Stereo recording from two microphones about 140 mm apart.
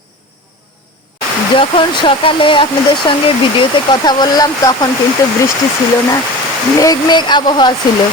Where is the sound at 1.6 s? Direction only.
35° left (ahead or behind).